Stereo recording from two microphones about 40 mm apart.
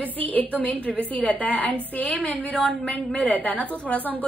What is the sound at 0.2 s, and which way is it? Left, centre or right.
A woman's voice, left.